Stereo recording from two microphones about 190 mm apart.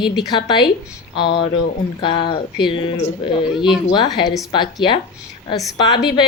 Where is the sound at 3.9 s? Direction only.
25° left (ahead or behind).